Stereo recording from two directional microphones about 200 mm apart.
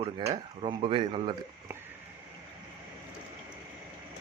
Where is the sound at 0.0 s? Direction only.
30° right (ahead or behind).